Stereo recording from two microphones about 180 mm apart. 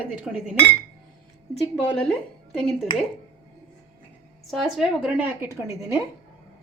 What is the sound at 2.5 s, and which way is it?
Speech, centre (ahead or behind).